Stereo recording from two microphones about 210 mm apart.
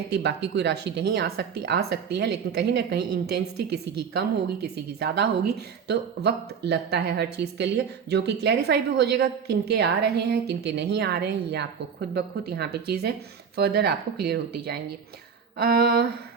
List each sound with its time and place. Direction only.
0.1 s speech: 55° right (ahead or behind)